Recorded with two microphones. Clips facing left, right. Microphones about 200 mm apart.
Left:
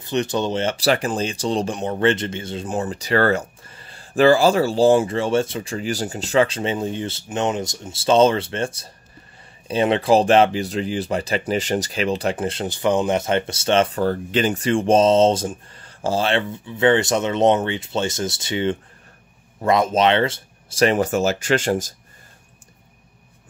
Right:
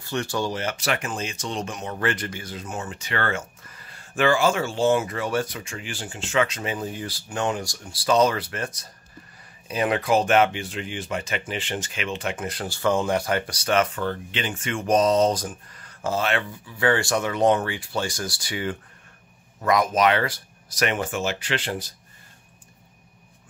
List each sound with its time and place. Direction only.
0.0 s speech: 20° left (ahead or behind); by 21.9 s 45° left (ahead or behind)